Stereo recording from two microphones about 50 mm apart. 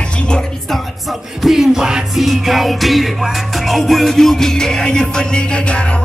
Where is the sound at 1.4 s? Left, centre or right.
Centre.